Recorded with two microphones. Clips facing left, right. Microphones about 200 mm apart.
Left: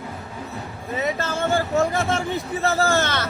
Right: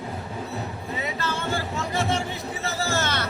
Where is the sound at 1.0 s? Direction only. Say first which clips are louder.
Left 6 dB; 45° left (ahead or behind).